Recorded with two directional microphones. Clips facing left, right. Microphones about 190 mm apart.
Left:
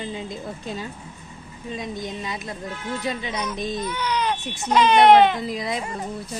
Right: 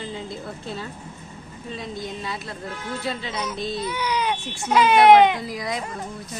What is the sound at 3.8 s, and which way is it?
A child's voice, 10° right (ahead or behind).